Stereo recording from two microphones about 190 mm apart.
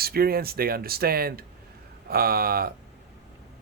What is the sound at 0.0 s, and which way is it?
Speech, 55° right (ahead or behind).